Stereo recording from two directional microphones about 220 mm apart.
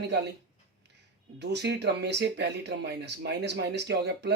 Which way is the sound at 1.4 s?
50° right (ahead or behind).